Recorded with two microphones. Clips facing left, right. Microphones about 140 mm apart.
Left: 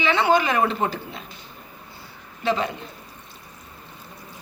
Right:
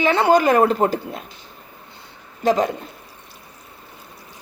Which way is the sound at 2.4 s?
40° right (ahead or behind).